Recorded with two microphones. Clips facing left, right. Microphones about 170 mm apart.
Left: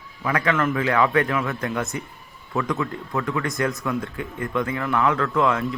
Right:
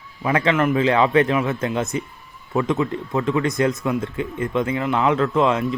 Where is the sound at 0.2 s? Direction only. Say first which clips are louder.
Right 3 dB; 25° right (ahead or behind).